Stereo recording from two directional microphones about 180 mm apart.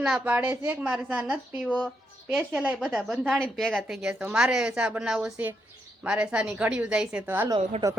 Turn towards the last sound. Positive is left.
turn(degrees=-20)  # may be behind; listen again after turning